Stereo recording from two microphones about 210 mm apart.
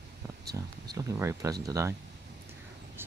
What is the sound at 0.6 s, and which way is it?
Speech, 15° right (ahead or behind).